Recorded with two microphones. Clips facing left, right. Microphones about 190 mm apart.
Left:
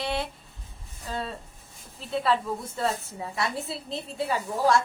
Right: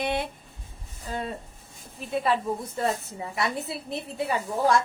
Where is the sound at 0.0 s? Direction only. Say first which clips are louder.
Right 2 dB; 20° right (ahead or behind).